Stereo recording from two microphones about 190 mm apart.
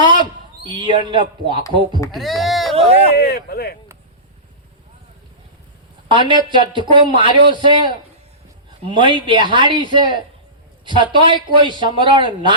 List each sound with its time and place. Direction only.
0.6 s a man's voice: 25° right (ahead or behind)
2.1 s speech: centre (ahead or behind)
2.7 s speech: 30° right (ahead or behind)
3.2 s speech: 55° left (ahead or behind)
6.1 s a man's voice: 25° right (ahead or behind)